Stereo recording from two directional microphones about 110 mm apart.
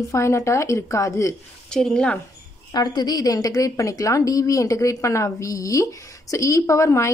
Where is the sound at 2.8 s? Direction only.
35° left (ahead or behind).